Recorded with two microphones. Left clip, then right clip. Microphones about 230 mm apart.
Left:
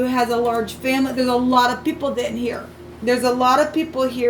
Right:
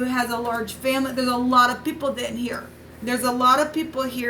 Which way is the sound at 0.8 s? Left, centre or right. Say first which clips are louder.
Left 2 dB; right.